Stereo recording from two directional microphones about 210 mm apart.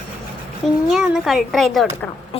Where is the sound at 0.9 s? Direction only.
Centre (ahead or behind).